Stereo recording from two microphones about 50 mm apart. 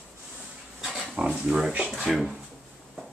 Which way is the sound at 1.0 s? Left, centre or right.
Right.